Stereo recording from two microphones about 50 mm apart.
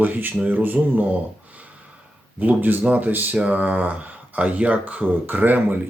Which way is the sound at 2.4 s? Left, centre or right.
Right.